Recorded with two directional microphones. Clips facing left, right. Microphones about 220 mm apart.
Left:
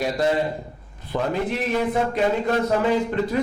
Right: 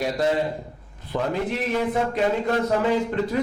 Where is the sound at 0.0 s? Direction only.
10° left (ahead or behind).